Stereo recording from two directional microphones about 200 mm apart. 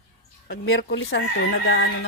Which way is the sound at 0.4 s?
70° left (ahead or behind).